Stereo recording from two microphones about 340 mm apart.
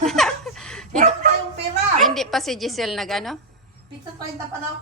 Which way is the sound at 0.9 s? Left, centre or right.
Right.